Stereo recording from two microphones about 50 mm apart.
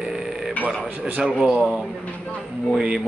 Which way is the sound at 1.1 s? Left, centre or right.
Centre.